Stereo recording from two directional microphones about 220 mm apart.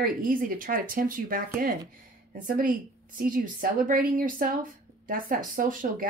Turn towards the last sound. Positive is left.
turn(degrees=-40)  # may be behind; listen again after turning